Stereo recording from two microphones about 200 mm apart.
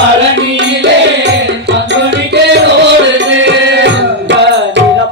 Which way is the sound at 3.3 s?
65° right (ahead or behind).